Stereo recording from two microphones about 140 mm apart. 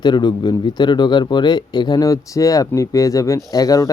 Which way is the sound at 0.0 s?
30° left (ahead or behind).